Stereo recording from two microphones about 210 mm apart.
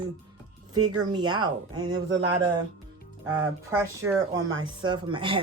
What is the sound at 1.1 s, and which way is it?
Speech, 20° right (ahead or behind).